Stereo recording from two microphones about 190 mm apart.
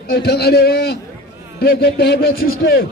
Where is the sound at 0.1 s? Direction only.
55° left (ahead or behind).